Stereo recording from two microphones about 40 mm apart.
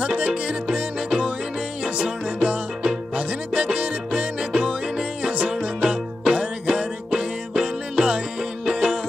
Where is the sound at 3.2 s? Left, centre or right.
Right.